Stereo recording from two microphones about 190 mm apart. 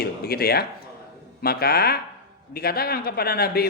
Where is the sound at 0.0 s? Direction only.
55° left (ahead or behind).